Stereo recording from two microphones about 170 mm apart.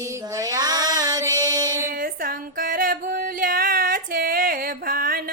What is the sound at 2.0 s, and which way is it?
Music, 55° right (ahead or behind).